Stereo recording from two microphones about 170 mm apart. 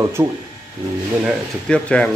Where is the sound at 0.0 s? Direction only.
15° right (ahead or behind).